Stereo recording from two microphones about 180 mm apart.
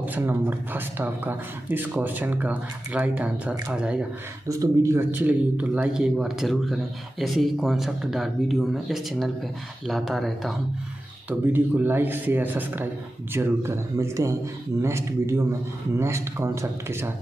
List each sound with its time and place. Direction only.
0.0 s speech: 10° right (ahead or behind)
4.5 s a man's voice: 15° right (ahead or behind)